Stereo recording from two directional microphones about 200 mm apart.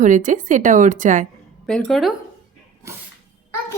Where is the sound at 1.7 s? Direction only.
5° left (ahead or behind).